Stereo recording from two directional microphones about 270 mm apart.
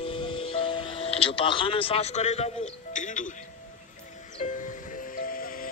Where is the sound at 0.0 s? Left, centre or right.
Centre.